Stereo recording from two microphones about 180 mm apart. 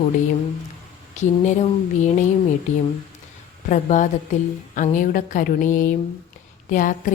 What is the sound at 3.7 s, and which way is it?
A woman's voice, 45° left (ahead or behind).